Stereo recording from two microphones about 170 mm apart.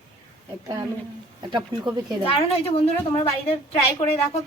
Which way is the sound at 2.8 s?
35° left (ahead or behind).